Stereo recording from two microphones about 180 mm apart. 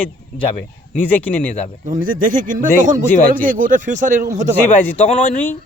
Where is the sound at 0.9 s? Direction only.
10° left (ahead or behind).